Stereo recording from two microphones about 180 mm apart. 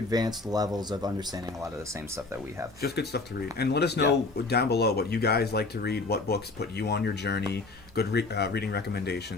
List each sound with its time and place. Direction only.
0.1 s speech: 20° right (ahead or behind)
2.8 s speech: 65° left (ahead or behind)